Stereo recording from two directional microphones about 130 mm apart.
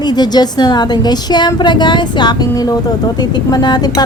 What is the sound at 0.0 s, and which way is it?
Speech, 35° left (ahead or behind).